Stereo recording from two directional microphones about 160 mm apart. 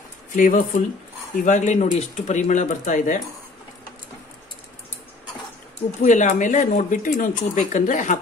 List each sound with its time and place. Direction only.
0.4 s speech: 55° left (ahead or behind)
6.0 s speech: 50° left (ahead or behind)